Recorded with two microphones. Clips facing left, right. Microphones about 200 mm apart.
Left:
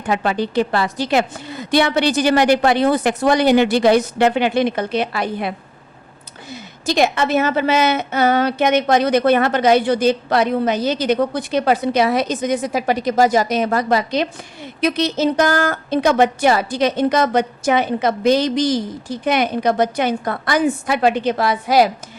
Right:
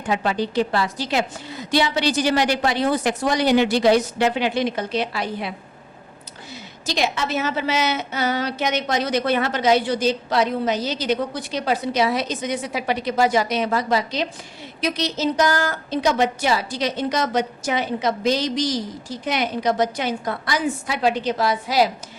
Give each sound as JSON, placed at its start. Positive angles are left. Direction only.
{"t": 0.1, "sound": "a woman's voice", "side_deg": 60}